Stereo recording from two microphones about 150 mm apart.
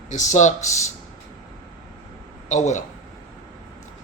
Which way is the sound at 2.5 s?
50° left (ahead or behind).